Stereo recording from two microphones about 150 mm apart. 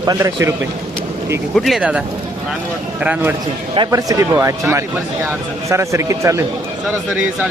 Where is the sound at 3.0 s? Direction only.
10° right (ahead or behind).